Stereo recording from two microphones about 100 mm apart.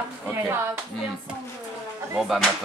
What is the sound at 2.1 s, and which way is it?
Speech, 5° right (ahead or behind).